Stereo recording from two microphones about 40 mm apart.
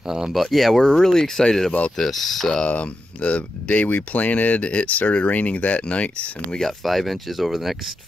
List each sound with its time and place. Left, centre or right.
0.0 s speech: centre
0.3 s speech: centre
2.7 s speech: left
6.8 s speech: centre